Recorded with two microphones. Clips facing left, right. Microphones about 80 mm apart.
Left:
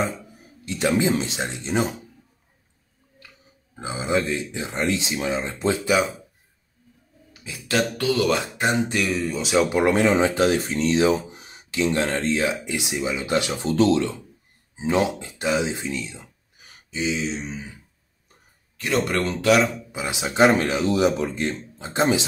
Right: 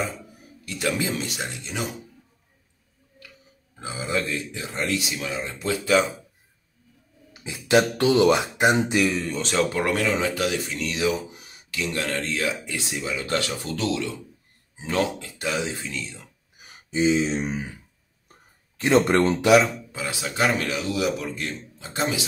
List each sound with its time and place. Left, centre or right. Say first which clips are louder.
0.7 s speech: left 5 dB; left
3.7 s speech: left 4 dB; left
7.4 s speech: right 4 dB; centre
8.9 s speech: right 1 dB; centre; by 14.1 s left
14.8 s speech: left 3 dB; centre
16.9 s speech: right 5 dB; right
18.8 s speech: right 5 dB; right
19.4 s speech: even; centre
19.9 s speech: left 2 dB; centre